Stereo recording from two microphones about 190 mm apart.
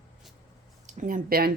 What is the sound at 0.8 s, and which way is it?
Speech, 45° right (ahead or behind).